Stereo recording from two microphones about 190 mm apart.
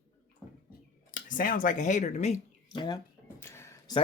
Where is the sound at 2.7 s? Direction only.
25° left (ahead or behind).